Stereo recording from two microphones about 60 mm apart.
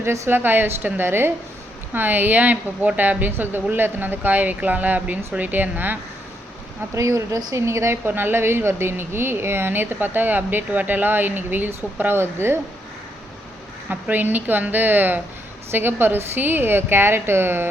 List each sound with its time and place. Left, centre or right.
0.0 s a woman's voice: right
6.9 s a woman's voice: right
8.0 s a woman's voice: right
13.9 s a woman's voice: right